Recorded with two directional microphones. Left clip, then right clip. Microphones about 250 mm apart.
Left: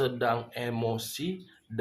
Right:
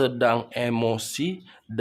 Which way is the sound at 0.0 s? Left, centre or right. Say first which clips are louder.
Right 6 dB; right.